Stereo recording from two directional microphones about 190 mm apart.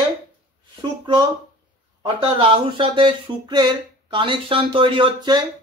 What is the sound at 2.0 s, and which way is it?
Speech, 30° right (ahead or behind).